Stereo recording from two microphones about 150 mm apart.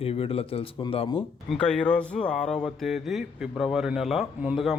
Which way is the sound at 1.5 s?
5° left (ahead or behind).